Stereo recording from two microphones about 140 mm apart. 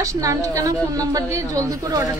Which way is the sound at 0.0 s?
20° right (ahead or behind).